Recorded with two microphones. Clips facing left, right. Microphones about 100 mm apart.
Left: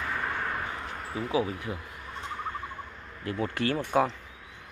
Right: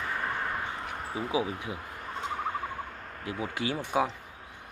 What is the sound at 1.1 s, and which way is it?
Speech, 15° right (ahead or behind).